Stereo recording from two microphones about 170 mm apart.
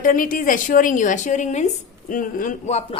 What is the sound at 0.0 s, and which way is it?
A woman's voice, 55° left (ahead or behind).